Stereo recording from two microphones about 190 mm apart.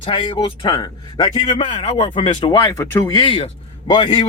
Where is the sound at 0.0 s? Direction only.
25° left (ahead or behind).